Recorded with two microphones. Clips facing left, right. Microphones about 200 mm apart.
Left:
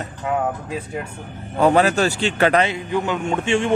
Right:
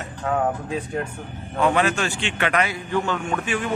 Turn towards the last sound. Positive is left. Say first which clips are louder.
# left 5 dB
turn(degrees=25)  # may be behind; listen again after turning